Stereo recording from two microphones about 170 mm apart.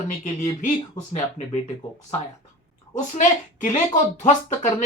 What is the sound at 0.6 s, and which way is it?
Speech, 45° left (ahead or behind).